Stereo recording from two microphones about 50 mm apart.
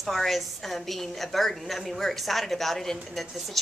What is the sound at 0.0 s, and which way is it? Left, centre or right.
A woman's voice, centre.